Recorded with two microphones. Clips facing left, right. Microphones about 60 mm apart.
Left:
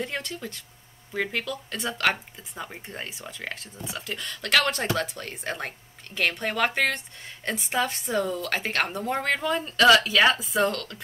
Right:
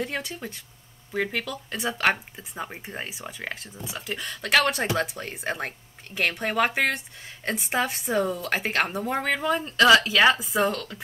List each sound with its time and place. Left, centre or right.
0.0 s speech: centre
0.3 s speech: centre
1.1 s speech: centre